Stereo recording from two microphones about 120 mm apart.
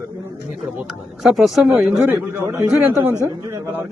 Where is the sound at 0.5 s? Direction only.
5° right (ahead or behind).